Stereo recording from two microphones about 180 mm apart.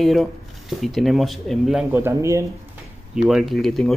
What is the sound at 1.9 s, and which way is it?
Speech, 15° right (ahead or behind).